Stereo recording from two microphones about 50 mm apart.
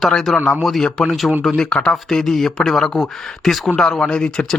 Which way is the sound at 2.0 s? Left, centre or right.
Centre.